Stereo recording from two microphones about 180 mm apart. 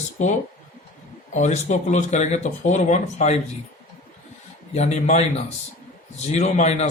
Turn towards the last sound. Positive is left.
turn(degrees=40)  # may be behind; listen again after turning